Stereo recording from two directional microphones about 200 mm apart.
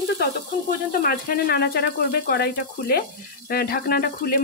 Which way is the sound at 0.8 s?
45° left (ahead or behind).